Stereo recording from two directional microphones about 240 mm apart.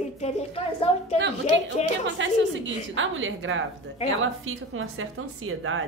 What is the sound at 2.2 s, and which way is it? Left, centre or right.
A woman's voice, right.